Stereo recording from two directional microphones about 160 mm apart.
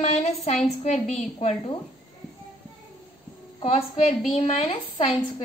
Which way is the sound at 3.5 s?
40° left (ahead or behind).